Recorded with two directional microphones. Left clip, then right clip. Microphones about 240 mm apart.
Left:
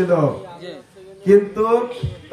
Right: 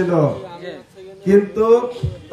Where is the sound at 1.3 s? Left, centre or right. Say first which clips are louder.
Right 1 dB; centre.